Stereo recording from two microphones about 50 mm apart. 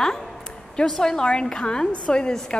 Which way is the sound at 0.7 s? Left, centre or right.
Centre.